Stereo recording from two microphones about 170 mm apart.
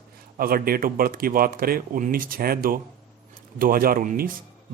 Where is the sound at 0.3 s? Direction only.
60° right (ahead or behind).